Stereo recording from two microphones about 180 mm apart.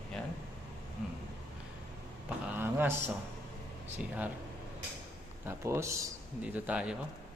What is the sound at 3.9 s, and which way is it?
Speech, 10° right (ahead or behind).